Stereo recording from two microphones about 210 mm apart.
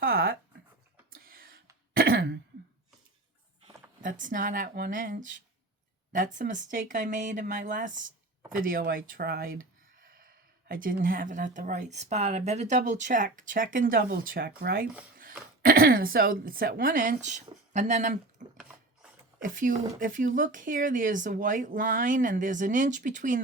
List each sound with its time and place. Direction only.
0.0 s a sound: 45° right (ahead or behind)
1.9 s throat clearing: 45° right (ahead or behind)
4.0 s speech: 40° right (ahead or behind)